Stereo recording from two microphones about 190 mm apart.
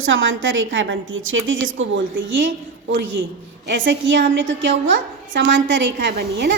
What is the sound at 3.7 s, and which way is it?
A woman's voice, 70° right (ahead or behind).